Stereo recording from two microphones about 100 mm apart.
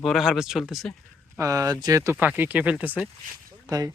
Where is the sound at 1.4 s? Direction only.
35° right (ahead or behind).